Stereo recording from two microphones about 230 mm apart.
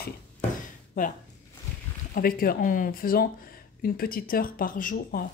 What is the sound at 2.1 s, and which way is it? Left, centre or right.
Speech, left.